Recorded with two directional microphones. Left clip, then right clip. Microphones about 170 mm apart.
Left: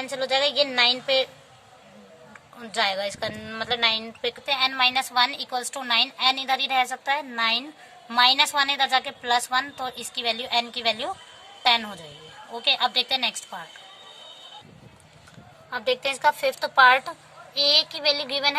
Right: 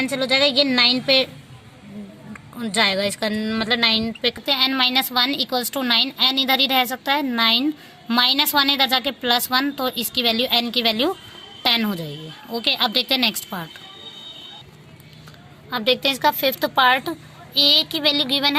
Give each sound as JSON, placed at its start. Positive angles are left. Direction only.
{"t": 0.0, "sound": "a woman's voice", "side_deg": -25}
{"t": 2.6, "sound": "a woman's voice", "side_deg": -25}
{"t": 15.7, "sound": "a woman's voice", "side_deg": -20}